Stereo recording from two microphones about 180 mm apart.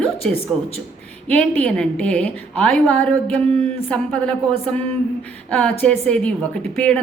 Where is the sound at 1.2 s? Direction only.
5° left (ahead or behind).